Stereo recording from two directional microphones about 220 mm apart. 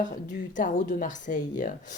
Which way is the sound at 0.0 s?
35° left (ahead or behind).